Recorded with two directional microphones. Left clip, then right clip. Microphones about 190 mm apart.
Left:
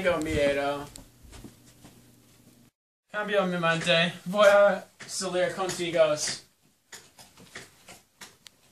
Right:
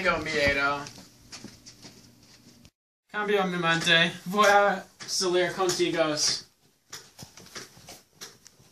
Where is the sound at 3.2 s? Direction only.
5° left (ahead or behind).